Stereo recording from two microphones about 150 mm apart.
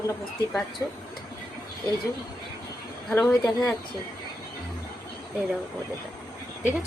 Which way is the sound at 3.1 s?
5° left (ahead or behind).